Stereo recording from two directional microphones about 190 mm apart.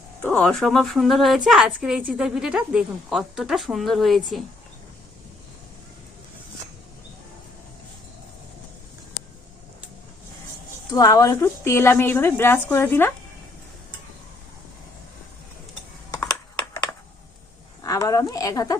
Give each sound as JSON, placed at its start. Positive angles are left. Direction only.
{"t": 0.2, "sound": "a woman's voice", "side_deg": 5}
{"t": 10.9, "sound": "speech", "side_deg": 20}
{"t": 16.1, "sound": "computer keyboard", "side_deg": 15}
{"t": 17.8, "sound": "speech", "side_deg": 15}